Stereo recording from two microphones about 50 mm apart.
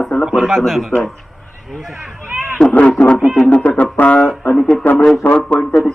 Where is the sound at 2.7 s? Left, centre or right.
Left.